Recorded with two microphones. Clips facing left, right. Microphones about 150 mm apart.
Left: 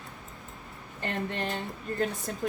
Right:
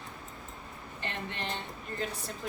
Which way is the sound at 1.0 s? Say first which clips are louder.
Left 6 dB; 45° left (ahead or behind).